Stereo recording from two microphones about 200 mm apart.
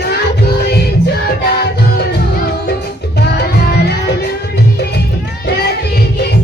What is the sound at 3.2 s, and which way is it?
Music, 55° left (ahead or behind).